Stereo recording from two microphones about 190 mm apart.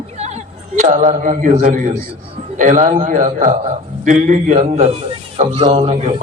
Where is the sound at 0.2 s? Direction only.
35° right (ahead or behind).